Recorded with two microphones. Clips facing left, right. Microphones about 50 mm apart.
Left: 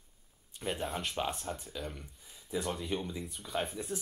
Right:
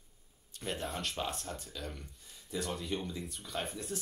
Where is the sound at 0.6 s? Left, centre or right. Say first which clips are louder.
Left 2 dB; centre.